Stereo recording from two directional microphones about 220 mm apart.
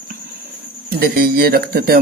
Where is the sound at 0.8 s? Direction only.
40° right (ahead or behind).